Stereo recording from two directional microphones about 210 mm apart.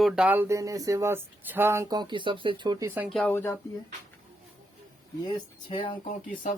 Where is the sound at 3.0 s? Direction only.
Centre (ahead or behind).